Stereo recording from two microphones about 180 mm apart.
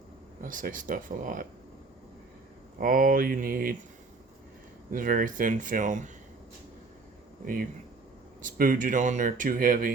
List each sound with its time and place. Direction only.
0.4 s speech: 50° right (ahead or behind)
2.8 s speech: 50° right (ahead or behind)
4.9 s speech: 50° right (ahead or behind)
7.4 s speech: 50° right (ahead or behind)